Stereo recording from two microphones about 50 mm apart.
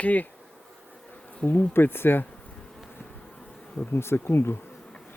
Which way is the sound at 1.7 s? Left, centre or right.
Left.